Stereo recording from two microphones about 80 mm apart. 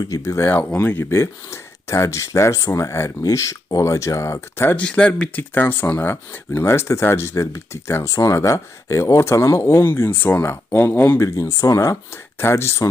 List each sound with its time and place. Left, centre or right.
0.0 s speech: left
0.4 s speech: left
4.8 s speech: centre
5.4 s speech: left
11.3 s speech: left